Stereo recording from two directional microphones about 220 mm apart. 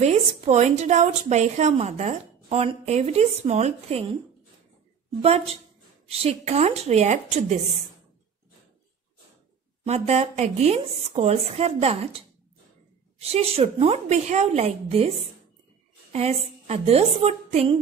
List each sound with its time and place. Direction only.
0.0 s a woman's voice: 30° right (ahead or behind)
6.0 s a woman's voice: 25° right (ahead or behind)
9.8 s a woman's voice: 30° right (ahead or behind)
13.2 s a woman's voice: 25° right (ahead or behind)